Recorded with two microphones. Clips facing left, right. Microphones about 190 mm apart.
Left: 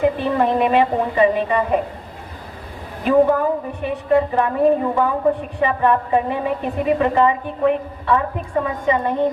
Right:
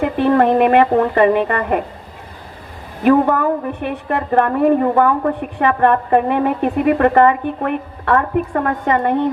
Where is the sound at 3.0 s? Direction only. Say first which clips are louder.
Right 2 dB; 60° right (ahead or behind).